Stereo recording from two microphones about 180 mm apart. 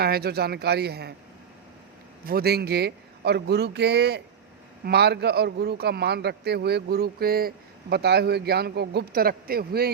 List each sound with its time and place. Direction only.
0.0 s a man's voice: 60° right (ahead or behind)
2.2 s a man's voice: 60° right (ahead or behind)